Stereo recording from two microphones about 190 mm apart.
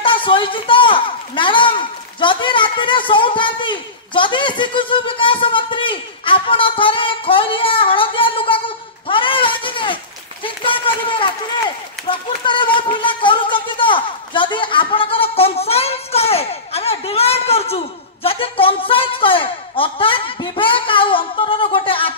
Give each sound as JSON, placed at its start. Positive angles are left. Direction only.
{"t": 0.0, "sound": "a man's voice", "side_deg": 25}